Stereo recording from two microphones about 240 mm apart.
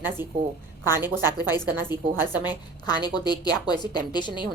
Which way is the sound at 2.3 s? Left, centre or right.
Centre.